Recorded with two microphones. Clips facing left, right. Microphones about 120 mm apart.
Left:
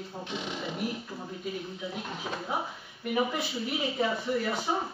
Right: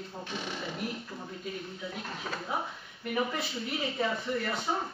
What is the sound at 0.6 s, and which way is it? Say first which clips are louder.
A woman's voice: left 3 dB; 5° left (ahead or behind).